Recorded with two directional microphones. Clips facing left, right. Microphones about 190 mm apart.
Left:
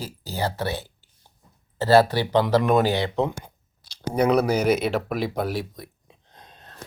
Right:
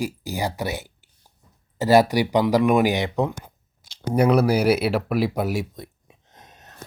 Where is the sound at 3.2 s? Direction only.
Centre (ahead or behind).